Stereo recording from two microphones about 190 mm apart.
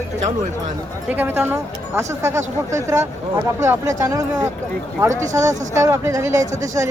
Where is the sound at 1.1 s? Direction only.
10° right (ahead or behind).